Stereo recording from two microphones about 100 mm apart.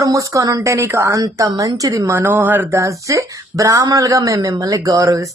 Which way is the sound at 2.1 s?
20° right (ahead or behind).